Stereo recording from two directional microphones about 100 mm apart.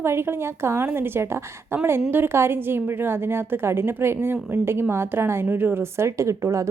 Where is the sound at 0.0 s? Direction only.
25° right (ahead or behind).